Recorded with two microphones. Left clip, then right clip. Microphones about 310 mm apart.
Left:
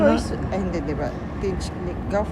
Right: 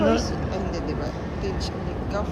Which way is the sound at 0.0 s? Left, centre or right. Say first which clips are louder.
Left 3 dB; left.